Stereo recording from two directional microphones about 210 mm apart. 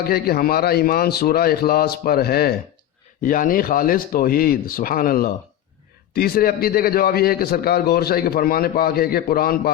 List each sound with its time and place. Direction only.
0.0 s a man's voice: 45° left (ahead or behind)